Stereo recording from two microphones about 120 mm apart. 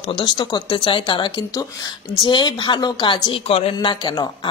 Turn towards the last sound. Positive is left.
turn(degrees=40)  # may be behind; listen again after turning